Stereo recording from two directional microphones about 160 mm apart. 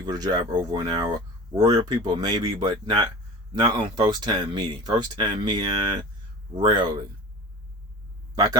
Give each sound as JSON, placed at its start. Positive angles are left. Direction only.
{"t": 0.0, "sound": "speech", "side_deg": -25}